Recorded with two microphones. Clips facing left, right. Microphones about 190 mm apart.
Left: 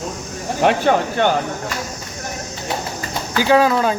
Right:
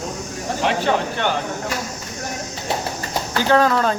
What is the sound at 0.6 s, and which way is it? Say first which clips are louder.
Speech: left 6 dB; 55° left (ahead or behind).